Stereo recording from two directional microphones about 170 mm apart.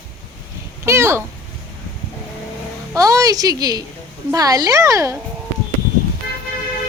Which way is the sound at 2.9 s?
20° right (ahead or behind).